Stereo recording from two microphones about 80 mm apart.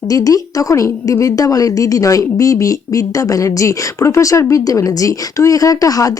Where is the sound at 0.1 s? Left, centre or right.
Left.